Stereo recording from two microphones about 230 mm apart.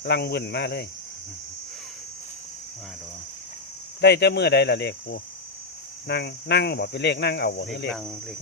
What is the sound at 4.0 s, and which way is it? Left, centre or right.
Speech, left.